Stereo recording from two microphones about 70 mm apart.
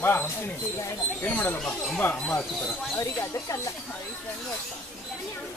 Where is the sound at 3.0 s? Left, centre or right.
Left.